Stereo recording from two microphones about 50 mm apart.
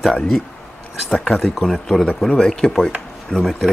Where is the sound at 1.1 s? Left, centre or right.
Centre.